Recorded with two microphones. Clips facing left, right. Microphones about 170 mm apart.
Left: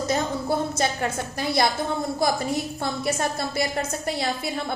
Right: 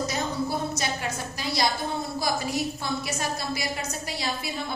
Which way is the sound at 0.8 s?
55° left (ahead or behind).